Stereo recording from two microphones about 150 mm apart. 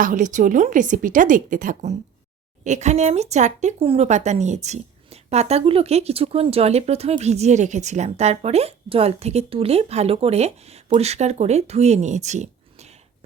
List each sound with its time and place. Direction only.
0.0 s a woman's voice: 60° right (ahead or behind)